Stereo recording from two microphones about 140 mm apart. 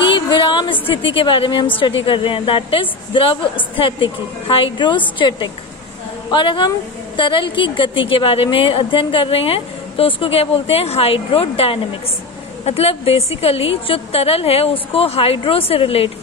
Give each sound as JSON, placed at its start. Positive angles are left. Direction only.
{"t": 0.1, "sound": "a sound", "side_deg": 35}
{"t": 0.8, "sound": "a woman's voice", "side_deg": 40}
{"t": 6.3, "sound": "a woman's voice", "side_deg": 35}